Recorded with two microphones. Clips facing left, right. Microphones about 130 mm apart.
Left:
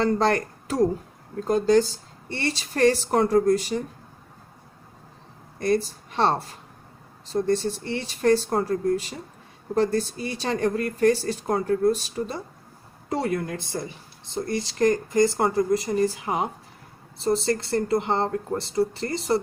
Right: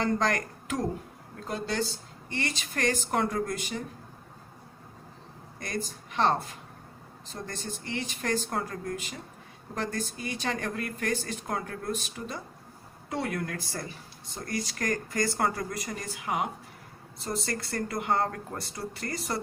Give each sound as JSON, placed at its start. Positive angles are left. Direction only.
{"t": 0.0, "sound": "speech", "side_deg": 35}
{"t": 5.5, "sound": "speech", "side_deg": 35}
{"t": 7.4, "sound": "speech", "side_deg": 35}
{"t": 13.4, "sound": "speech", "side_deg": 25}